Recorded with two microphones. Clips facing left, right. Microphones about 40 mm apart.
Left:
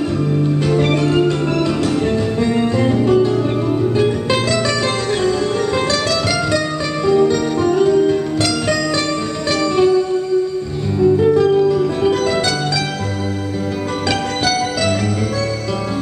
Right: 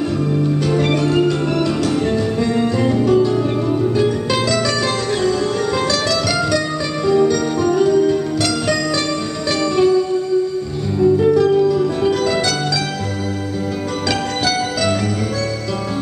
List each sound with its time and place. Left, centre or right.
0.7 s music: centre
2.8 s music: centre
9.5 s music: centre
11.0 s music: centre
14.4 s music: centre